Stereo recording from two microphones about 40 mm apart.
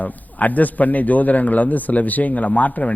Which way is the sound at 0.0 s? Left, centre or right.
Left.